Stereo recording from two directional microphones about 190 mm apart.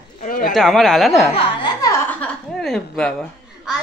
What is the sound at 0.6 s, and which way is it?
Speech, centre (ahead or behind).